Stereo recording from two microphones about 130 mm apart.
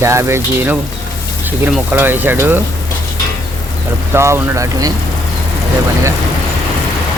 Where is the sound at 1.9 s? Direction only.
15° right (ahead or behind).